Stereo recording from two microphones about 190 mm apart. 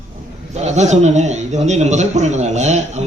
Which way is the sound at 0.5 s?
35° right (ahead or behind).